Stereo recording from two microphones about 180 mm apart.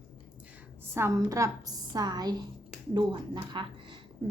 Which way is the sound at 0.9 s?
15° right (ahead or behind).